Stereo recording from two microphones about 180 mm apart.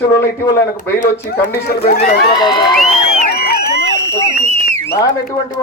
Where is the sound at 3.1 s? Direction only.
55° left (ahead or behind).